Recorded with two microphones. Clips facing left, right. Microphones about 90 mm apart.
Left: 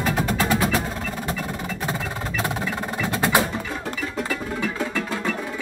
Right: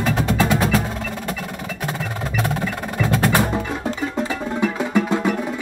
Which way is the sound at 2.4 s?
15° left (ahead or behind).